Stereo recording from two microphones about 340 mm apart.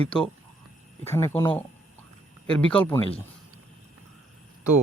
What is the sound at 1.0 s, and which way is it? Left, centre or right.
Speech, centre.